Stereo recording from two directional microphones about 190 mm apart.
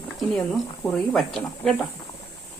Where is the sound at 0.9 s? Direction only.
Centre (ahead or behind).